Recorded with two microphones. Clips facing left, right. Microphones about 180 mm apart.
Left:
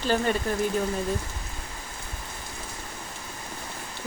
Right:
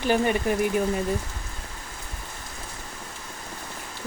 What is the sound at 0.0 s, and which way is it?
Speech, 15° right (ahead or behind).